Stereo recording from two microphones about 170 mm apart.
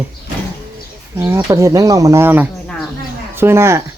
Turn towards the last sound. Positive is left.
turn(degrees=-15)  # may be behind; listen again after turning